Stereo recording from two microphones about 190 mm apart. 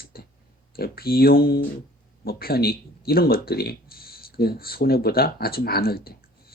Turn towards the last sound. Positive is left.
turn(degrees=55)  # may be behind; listen again after turning